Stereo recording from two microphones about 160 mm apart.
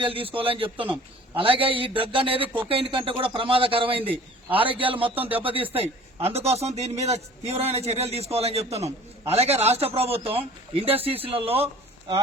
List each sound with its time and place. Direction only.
0.0 s a man's voice: 35° right (ahead or behind)